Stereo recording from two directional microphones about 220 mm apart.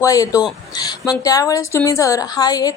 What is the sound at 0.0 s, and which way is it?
A woman's voice, 15° left (ahead or behind).